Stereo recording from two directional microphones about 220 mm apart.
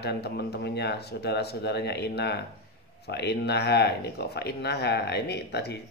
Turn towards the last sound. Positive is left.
turn(degrees=50)  # may be behind; listen again after turning